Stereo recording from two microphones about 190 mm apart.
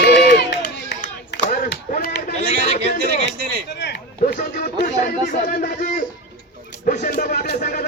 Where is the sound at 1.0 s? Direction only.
45° left (ahead or behind).